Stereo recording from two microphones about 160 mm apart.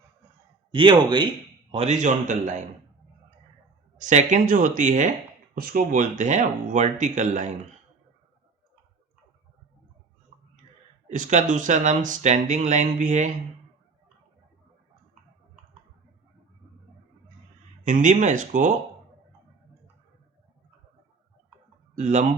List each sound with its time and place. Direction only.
0.7 s speech: 30° right (ahead or behind)
1.7 s speech: 40° right (ahead or behind)
3.9 s speech: 50° right (ahead or behind)
5.5 s speech: 60° right (ahead or behind)
11.1 s speech: 50° right (ahead or behind)
17.8 s speech: 50° right (ahead or behind)
21.9 s speech: 45° right (ahead or behind)